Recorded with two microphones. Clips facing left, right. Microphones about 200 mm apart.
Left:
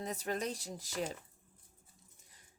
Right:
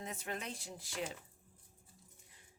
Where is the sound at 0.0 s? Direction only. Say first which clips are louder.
Left 6 dB; 40° left (ahead or behind).